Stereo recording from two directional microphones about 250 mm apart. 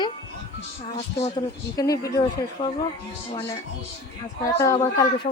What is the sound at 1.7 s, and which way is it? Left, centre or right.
A woman's voice, centre.